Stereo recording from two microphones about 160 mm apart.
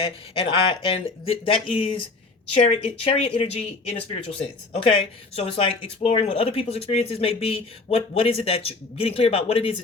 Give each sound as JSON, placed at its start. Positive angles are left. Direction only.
{"t": 0.0, "sound": "speech", "side_deg": 35}
{"t": 2.5, "sound": "a woman's voice", "side_deg": 45}
{"t": 3.0, "sound": "speech", "side_deg": 35}